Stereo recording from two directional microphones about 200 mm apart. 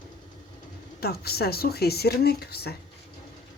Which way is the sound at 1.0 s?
50° left (ahead or behind).